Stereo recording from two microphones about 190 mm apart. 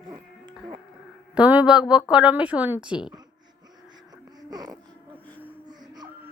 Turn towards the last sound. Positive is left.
turn(degrees=-20)  # may be behind; listen again after turning